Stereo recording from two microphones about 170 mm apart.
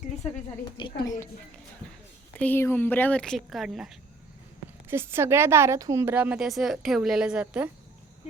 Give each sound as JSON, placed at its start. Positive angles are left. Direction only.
{"t": 0.8, "sound": "a woman's voice", "side_deg": 25}
{"t": 2.4, "sound": "a woman's voice", "side_deg": 10}
{"t": 4.9, "sound": "a woman's voice", "side_deg": -15}